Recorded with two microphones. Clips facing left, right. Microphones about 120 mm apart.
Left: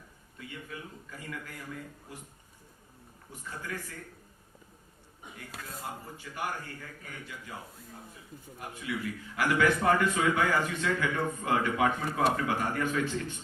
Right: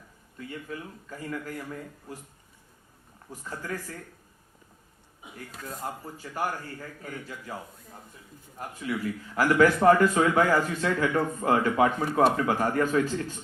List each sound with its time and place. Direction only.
0.3 s a man's voice: 40° right (ahead or behind)
3.6 s a man's voice: 40° right (ahead or behind)
5.2 s a sound: 5° right (ahead or behind)
5.8 s a man's voice: 40° right (ahead or behind)
8.5 s a man's voice: 40° right (ahead or behind)